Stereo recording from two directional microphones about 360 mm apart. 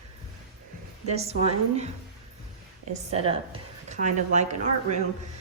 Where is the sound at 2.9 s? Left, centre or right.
Centre.